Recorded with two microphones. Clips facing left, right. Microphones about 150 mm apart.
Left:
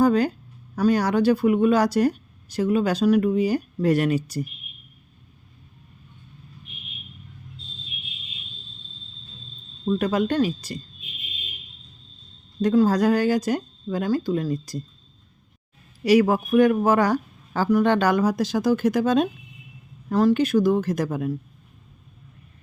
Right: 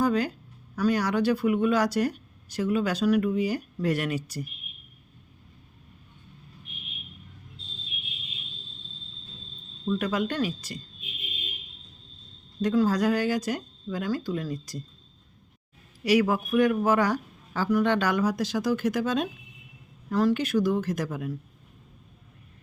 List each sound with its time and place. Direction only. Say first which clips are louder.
0.0 s speech: left 6 dB; 40° left (ahead or behind)
9.8 s speech: left 5 dB; 40° left (ahead or behind)
12.6 s speech: left 5 dB; 40° left (ahead or behind)
16.0 s speech: left 5 dB; 35° left (ahead or behind)
20.3 s speech: left 5 dB; 35° left (ahead or behind)